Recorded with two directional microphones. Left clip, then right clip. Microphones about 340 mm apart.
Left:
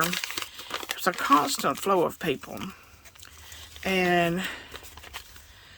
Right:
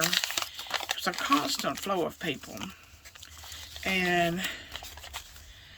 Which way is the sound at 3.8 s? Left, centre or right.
Centre.